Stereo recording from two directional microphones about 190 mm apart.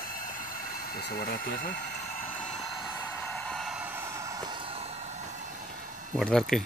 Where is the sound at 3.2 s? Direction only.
5° left (ahead or behind); by 4.6 s 15° right (ahead or behind).